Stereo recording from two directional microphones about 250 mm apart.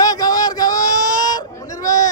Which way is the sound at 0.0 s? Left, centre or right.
Centre.